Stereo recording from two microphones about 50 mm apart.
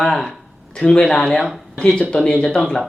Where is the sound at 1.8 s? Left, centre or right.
Centre.